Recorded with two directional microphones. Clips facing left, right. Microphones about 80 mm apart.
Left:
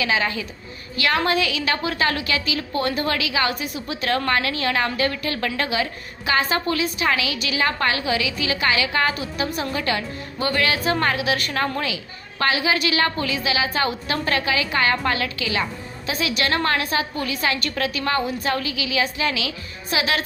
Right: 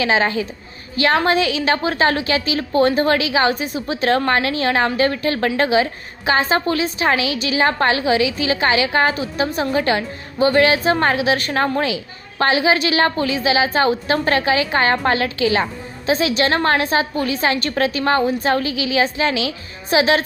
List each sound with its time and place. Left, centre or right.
0.0 s a woman's voice: right